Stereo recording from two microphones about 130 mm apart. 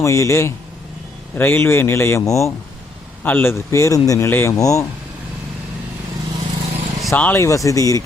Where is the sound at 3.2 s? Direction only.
15° left (ahead or behind).